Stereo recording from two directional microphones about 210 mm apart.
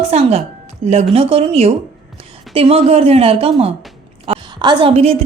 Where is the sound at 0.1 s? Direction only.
30° right (ahead or behind).